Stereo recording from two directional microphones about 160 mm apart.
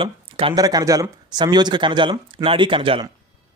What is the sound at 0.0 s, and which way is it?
Speech, 35° right (ahead or behind).